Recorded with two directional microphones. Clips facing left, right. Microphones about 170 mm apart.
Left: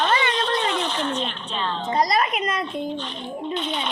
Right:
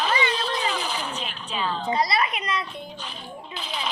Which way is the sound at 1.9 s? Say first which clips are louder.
Left 7 dB; 45° left (ahead or behind).